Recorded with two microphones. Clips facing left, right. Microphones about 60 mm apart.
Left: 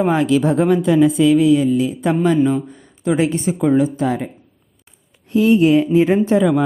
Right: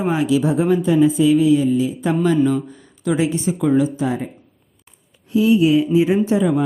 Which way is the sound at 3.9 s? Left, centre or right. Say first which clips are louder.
Left 2 dB; left.